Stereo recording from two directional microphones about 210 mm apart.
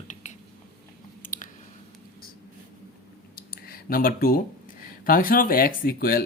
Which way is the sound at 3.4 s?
45° left (ahead or behind).